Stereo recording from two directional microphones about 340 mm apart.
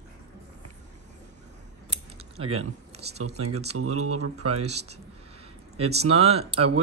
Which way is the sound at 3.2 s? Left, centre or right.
Right.